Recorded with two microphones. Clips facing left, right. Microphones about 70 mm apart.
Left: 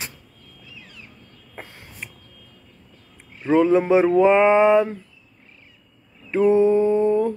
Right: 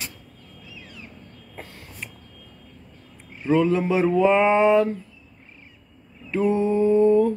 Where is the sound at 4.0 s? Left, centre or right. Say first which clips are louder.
Left 3 dB; left.